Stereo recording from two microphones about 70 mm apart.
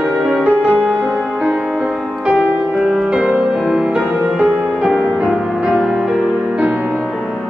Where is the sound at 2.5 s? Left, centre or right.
Centre.